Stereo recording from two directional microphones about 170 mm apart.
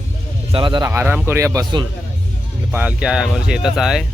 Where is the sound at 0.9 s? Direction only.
10° right (ahead or behind).